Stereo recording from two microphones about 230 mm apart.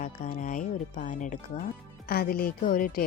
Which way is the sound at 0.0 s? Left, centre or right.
Left.